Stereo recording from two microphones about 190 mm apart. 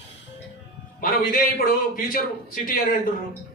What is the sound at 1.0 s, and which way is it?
Speech, 50° left (ahead or behind).